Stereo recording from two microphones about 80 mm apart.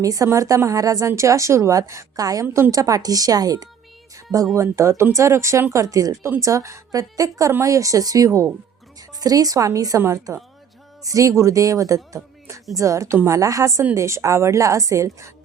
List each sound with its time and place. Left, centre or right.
0.0 s a woman's voice: right
11.0 s a woman's voice: right